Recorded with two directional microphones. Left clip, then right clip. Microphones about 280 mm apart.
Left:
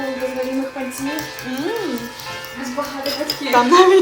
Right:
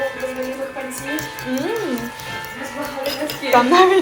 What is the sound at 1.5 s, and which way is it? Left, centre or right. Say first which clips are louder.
Speech: right 2 dB; centre.